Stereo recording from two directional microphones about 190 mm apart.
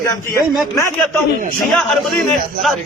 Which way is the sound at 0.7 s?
15° left (ahead or behind).